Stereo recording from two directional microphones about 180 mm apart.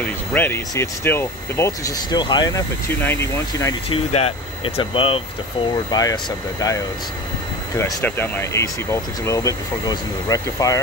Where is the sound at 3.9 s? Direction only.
35° left (ahead or behind).